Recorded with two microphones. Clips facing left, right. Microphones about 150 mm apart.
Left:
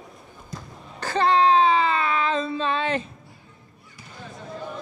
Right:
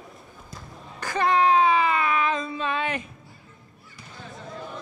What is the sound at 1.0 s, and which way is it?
Child singing, 30° left (ahead or behind).